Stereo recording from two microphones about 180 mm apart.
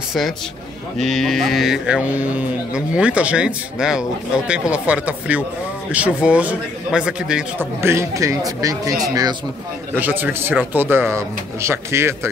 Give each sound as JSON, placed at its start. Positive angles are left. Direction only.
{"t": 0.9, "sound": "a man's voice", "side_deg": 0}
{"t": 7.9, "sound": "speech", "side_deg": -15}
{"t": 9.9, "sound": "a man's voice", "side_deg": -10}